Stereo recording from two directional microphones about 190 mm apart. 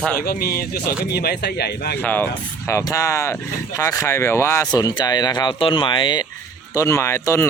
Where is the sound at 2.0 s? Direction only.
10° left (ahead or behind).